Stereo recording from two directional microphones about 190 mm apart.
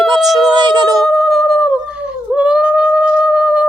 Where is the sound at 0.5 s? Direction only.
25° right (ahead or behind).